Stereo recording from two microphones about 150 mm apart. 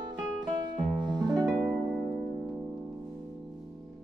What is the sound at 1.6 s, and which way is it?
Harp, 20° right (ahead or behind).